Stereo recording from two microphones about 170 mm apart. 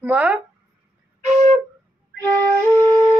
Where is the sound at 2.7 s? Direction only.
10° left (ahead or behind).